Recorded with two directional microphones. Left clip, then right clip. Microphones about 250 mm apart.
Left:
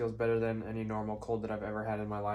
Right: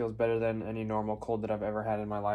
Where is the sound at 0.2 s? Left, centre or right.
Right.